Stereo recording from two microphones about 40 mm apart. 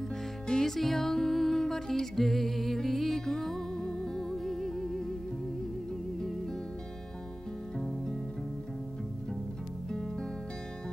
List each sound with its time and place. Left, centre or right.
0.5 s music: centre